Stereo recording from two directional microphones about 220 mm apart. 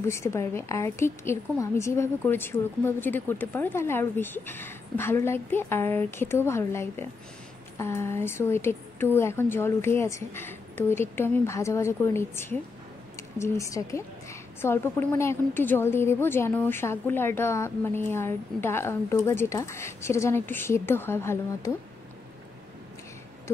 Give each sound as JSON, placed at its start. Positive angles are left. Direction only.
{"t": 0.0, "sound": "a woman's voice", "side_deg": 10}